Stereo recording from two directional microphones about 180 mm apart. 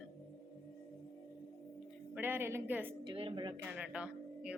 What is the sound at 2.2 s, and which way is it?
Speech, 10° right (ahead or behind).